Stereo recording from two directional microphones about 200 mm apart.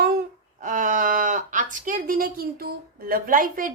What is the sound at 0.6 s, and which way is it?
A woman's voice, 40° right (ahead or behind).